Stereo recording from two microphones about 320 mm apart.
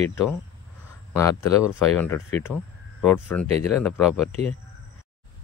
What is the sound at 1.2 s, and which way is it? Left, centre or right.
Speech, centre.